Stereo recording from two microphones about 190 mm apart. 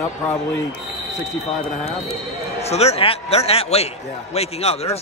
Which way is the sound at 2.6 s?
35° left (ahead or behind).